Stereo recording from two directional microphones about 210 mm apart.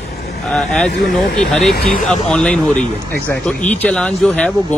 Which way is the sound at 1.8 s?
45° left (ahead or behind).